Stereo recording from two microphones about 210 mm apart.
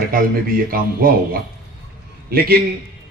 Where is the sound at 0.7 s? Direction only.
45° right (ahead or behind).